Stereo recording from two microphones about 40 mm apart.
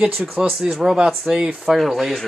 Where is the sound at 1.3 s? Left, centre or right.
Right.